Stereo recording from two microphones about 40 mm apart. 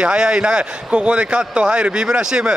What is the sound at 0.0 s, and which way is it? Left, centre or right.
Speech, right.